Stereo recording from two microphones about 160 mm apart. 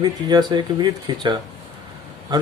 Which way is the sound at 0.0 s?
25° right (ahead or behind).